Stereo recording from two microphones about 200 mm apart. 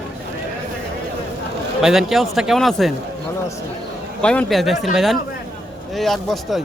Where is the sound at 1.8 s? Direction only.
Centre (ahead or behind).